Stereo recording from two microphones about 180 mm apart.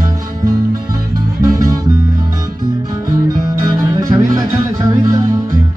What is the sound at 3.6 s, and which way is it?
Music, 20° right (ahead or behind).